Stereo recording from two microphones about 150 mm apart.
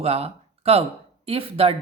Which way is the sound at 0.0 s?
40° right (ahead or behind).